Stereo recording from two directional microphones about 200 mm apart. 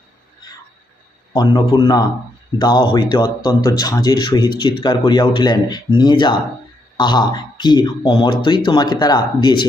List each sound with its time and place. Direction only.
1.3 s speech: 20° left (ahead or behind)